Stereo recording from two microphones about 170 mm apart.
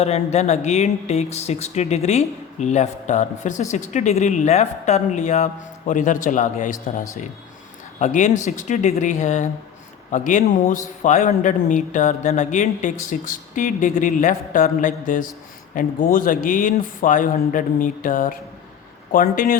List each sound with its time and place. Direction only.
0.0 s speech: 40° left (ahead or behind)